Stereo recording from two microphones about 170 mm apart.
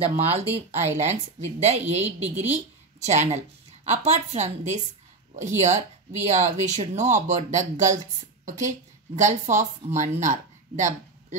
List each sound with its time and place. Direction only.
0.0 s speech: 35° right (ahead or behind)